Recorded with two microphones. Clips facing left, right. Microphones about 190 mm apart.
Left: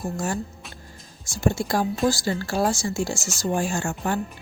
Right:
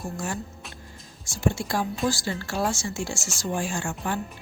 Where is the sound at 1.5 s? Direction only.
40° left (ahead or behind).